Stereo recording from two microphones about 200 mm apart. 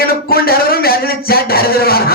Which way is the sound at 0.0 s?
50° left (ahead or behind).